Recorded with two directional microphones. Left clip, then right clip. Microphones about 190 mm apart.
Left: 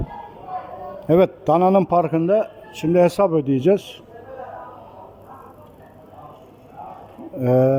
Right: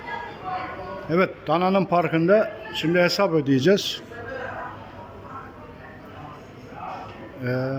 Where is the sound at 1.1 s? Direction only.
30° left (ahead or behind).